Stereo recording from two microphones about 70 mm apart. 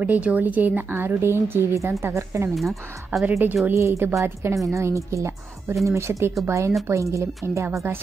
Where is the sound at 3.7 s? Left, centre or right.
Right.